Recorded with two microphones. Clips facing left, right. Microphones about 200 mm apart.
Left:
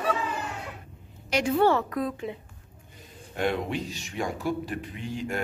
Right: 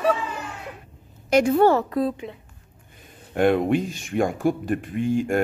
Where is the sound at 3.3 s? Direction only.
55° right (ahead or behind).